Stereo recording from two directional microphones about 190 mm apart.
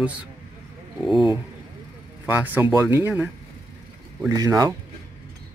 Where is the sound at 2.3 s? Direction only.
10° right (ahead or behind).